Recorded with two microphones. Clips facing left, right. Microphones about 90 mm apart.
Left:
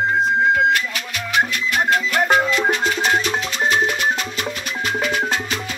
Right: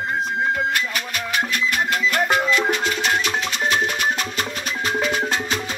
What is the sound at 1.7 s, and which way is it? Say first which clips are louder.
Music: left 4 dB; 40° left (ahead or behind).